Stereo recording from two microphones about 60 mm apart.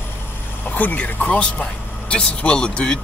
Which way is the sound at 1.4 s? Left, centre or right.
Left.